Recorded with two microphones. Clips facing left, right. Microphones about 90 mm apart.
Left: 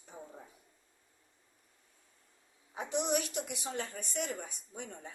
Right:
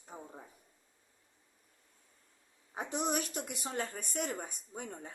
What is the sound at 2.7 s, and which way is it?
A woman's voice, 45° right (ahead or behind).